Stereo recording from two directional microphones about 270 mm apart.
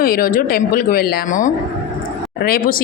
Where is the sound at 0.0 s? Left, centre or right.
Left.